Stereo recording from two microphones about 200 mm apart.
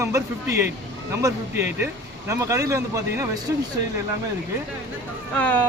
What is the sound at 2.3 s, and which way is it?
Speech, 15° right (ahead or behind).